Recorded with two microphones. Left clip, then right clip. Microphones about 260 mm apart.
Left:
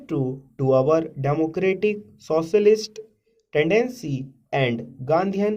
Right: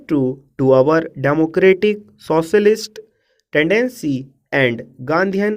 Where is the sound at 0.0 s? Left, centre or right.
Right.